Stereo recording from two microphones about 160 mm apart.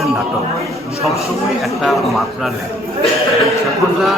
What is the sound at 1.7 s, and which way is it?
Speech, centre (ahead or behind).